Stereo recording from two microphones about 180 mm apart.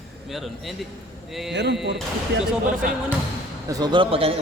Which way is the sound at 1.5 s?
70° right (ahead or behind).